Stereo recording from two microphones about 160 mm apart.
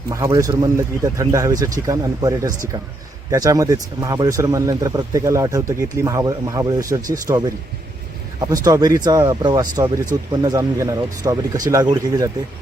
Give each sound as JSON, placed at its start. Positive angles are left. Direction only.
{"t": 0.1, "sound": "speech", "side_deg": -20}
{"t": 8.4, "sound": "speech", "side_deg": -20}